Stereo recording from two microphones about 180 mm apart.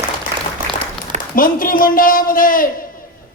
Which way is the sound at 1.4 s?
50° left (ahead or behind).